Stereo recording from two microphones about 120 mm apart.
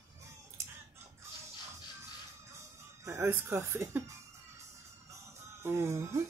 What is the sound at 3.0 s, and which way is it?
Speech, 20° right (ahead or behind).